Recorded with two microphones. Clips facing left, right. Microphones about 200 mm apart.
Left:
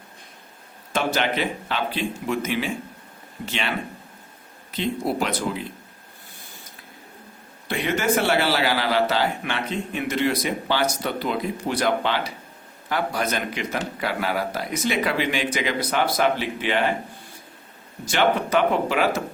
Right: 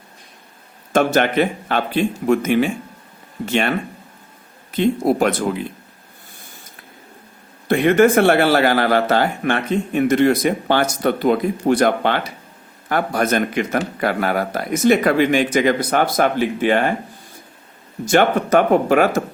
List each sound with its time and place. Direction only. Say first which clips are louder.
0.9 s a man's voice: right 8 dB; 50° right (ahead or behind)
7.7 s a man's voice: right 10 dB; 55° right (ahead or behind)
18.0 s a man's voice: right 6 dB; 50° right (ahead or behind)